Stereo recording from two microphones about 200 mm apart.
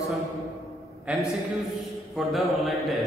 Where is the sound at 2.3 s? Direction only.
Centre (ahead or behind).